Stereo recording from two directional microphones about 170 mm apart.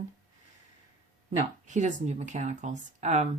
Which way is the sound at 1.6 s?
45° right (ahead or behind).